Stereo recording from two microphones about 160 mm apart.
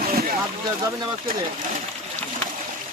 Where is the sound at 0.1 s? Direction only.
65° right (ahead or behind).